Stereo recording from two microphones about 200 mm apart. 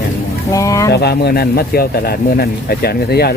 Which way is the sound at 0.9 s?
55° left (ahead or behind).